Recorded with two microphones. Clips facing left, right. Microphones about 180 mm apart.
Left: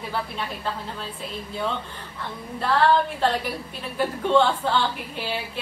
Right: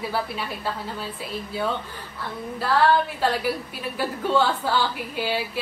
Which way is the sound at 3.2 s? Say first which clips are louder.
Right 1 dB; 5° right (ahead or behind).